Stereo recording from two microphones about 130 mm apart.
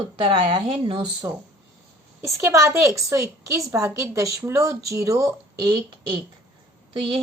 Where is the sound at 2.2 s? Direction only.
20° right (ahead or behind).